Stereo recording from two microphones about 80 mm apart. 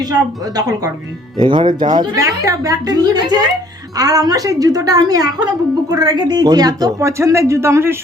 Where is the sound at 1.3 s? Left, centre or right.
Right.